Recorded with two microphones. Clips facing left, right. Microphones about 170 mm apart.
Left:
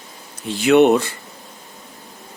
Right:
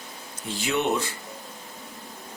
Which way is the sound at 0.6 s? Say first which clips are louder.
Left 13 dB; 65° left (ahead or behind).